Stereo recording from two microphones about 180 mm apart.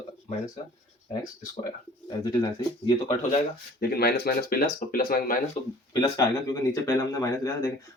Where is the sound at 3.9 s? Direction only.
60° left (ahead or behind).